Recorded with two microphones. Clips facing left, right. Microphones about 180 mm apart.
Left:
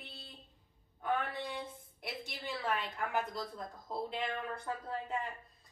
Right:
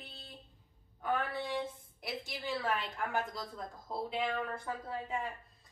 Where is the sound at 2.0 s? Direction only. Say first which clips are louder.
Right 3 dB; centre (ahead or behind).